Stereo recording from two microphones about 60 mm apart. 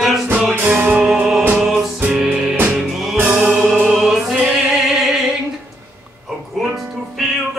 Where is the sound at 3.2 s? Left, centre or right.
Right.